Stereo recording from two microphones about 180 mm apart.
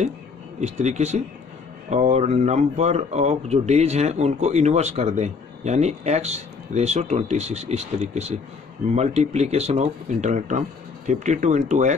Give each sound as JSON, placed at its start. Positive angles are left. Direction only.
{"t": 0.6, "sound": "speech", "side_deg": -40}